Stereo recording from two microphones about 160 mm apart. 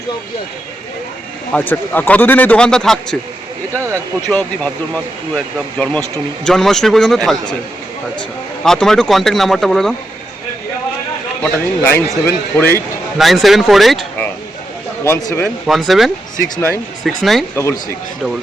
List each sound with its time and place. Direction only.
1.5 s a man's voice: 10° left (ahead or behind)
3.8 s speech: 15° right (ahead or behind)
4.3 s a man's voice: 10° left (ahead or behind)
5.7 s a man's voice: 5° left (ahead or behind)
8.6 s speech: 5° left (ahead or behind)
11.4 s a man's voice: 10° left (ahead or behind)
13.1 s speech: centre (ahead or behind)
15.0 s a man's voice: 15° left (ahead or behind)
15.6 s speech: centre (ahead or behind)
16.6 s a man's voice: 15° left (ahead or behind)
17.0 s speech: centre (ahead or behind)
17.5 s a man's voice: 15° left (ahead or behind)